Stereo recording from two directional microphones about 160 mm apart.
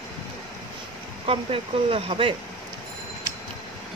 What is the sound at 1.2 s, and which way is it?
Speech, 35° right (ahead or behind).